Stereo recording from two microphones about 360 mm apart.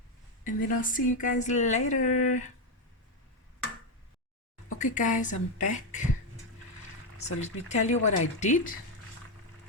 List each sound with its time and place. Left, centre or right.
0.4 s speech: left
4.8 s speech: left
7.4 s speech: centre